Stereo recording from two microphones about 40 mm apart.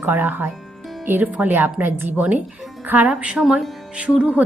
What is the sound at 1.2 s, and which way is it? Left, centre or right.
Speech, right.